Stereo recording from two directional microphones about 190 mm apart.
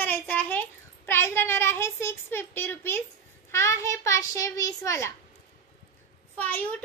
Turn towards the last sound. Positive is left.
turn(degrees=10)  # may be behind; listen again after turning